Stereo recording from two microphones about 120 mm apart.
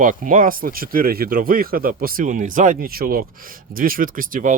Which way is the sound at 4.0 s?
90° right.